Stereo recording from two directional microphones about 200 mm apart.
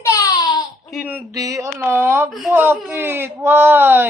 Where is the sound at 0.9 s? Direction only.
5° right (ahead or behind).